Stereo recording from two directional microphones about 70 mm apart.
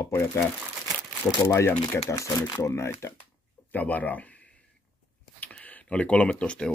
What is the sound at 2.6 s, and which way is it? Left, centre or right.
Speech, left.